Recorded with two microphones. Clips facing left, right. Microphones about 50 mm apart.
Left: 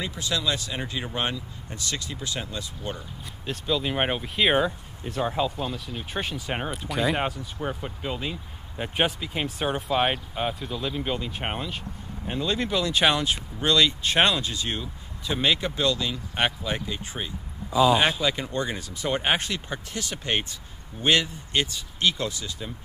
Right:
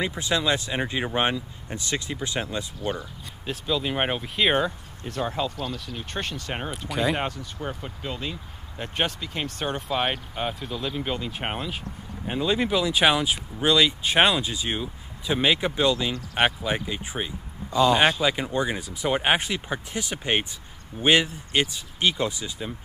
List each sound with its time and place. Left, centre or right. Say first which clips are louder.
0.0 s speech: right 3 dB; right
3.4 s speech: even; centre
17.6 s speech: right 1 dB; centre
18.2 s speech: right 2 dB; centre